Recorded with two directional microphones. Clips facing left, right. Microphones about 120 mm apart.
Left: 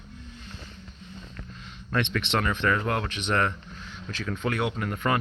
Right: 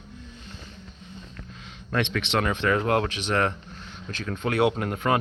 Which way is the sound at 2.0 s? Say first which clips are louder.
Right 1 dB; 90° right.